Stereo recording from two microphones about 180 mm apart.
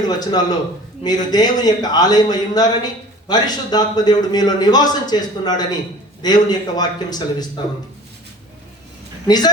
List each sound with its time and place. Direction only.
0.2 s a man's voice: 20° left (ahead or behind)
9.2 s a man's voice: 20° left (ahead or behind)